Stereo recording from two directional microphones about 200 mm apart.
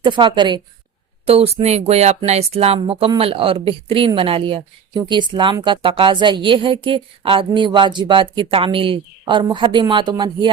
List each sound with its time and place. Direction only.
0.0 s speech: 25° right (ahead or behind)